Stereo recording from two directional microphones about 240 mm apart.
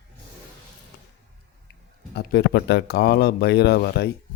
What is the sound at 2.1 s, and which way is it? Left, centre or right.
Speech, left.